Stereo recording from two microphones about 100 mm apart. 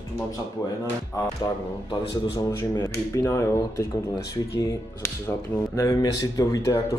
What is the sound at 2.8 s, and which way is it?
Speech, 30° left (ahead or behind).